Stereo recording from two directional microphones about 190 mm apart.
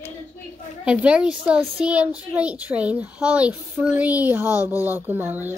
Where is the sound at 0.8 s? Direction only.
5° right (ahead or behind).